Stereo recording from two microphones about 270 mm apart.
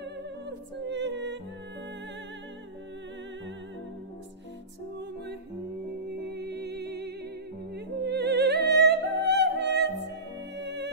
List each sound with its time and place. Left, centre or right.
0.5 s music: right
6.1 s music: right